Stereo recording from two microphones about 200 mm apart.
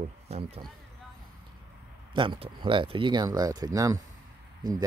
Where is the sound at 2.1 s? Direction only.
25° right (ahead or behind).